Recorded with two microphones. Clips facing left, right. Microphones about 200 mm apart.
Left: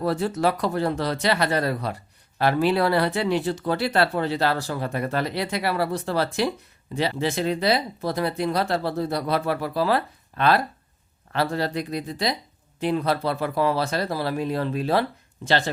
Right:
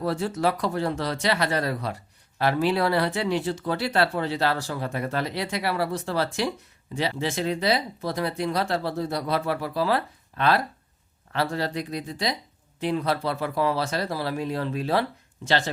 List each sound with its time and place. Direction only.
0.0 s speech: 60° left (ahead or behind)
0.4 s speech: 50° left (ahead or behind)